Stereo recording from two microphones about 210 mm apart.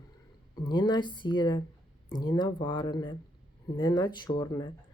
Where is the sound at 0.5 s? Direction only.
20° left (ahead or behind).